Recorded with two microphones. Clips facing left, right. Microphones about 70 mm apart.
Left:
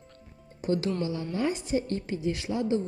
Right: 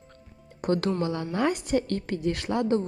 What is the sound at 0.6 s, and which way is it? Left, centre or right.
Speech, right.